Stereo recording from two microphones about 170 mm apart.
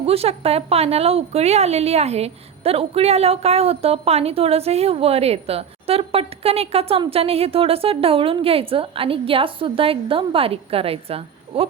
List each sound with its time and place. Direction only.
0.0 s a woman's voice: 35° right (ahead or behind)